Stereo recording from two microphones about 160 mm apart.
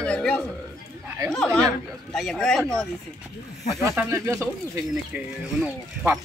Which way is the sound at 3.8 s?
15° right (ahead or behind).